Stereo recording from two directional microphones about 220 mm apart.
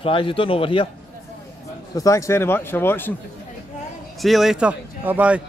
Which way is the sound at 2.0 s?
15° left (ahead or behind).